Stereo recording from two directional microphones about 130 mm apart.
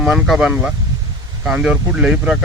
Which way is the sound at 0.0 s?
Centre (ahead or behind).